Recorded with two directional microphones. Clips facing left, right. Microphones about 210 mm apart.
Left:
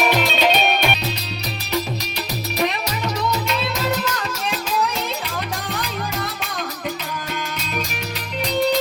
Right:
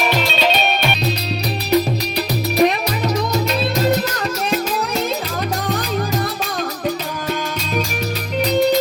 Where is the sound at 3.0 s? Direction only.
40° right (ahead or behind).